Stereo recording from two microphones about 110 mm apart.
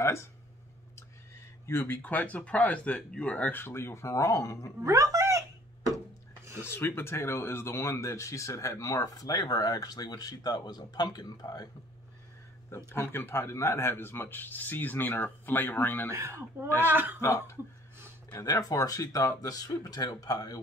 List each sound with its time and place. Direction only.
0.9 s speech: 25° left (ahead or behind)
4.8 s speech: 30° right (ahead or behind)
6.6 s speech: 20° left (ahead or behind); by 11.7 s 35° left (ahead or behind)
12.7 s a man's voice: 25° left (ahead or behind)
16.1 s speech: 25° right (ahead or behind)
17.2 s a man's voice: 25° left (ahead or behind)